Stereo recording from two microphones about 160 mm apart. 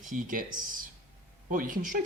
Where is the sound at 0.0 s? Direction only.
55° right (ahead or behind).